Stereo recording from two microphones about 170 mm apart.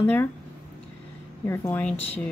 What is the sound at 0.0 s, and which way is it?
Speech, 10° left (ahead or behind).